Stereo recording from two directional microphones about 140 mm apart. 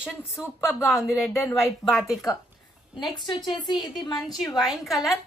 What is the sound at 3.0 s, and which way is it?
Speech, 35° left (ahead or behind).